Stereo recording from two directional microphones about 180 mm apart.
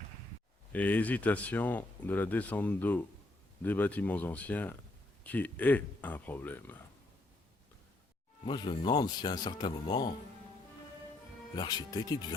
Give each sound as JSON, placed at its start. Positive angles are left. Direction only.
{"t": 0.7, "sound": "speech", "side_deg": 10}
{"t": 8.4, "sound": "speech", "side_deg": 25}
{"t": 11.5, "sound": "speech", "side_deg": 25}